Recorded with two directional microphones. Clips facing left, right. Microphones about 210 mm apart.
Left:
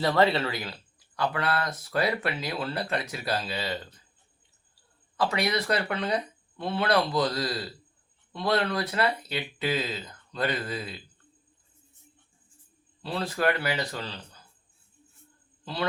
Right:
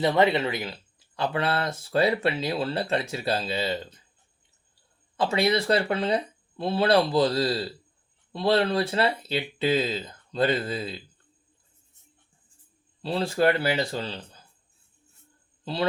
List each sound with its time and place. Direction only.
0.0 s speech: 20° right (ahead or behind)
5.1 s speech: 25° right (ahead or behind)
13.0 s speech: 30° right (ahead or behind)
15.6 s a man's voice: 30° right (ahead or behind)